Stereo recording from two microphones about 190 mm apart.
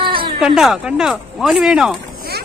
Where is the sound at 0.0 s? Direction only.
25° right (ahead or behind).